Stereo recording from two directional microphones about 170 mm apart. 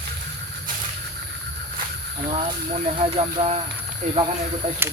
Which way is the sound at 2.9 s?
35° right (ahead or behind).